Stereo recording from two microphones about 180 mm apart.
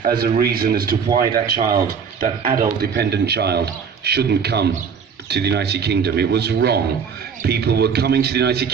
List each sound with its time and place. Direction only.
0.0 s speech: 55° right (ahead or behind)